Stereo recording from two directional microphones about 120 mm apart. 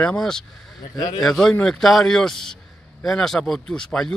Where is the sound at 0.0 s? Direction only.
5° left (ahead or behind).